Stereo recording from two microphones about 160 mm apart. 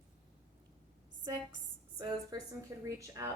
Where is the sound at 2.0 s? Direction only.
25° right (ahead or behind).